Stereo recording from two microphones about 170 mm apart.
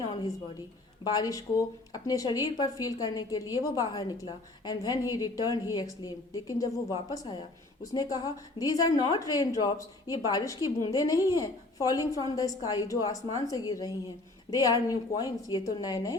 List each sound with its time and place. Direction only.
1.0 s a woman's voice: 20° left (ahead or behind)